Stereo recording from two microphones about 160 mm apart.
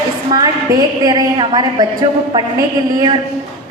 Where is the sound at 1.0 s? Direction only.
25° right (ahead or behind).